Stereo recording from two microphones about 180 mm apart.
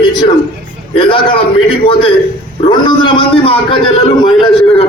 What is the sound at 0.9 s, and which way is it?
A man's voice, 30° left (ahead or behind).